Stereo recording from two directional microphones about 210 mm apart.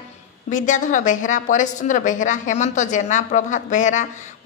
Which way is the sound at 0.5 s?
35° left (ahead or behind).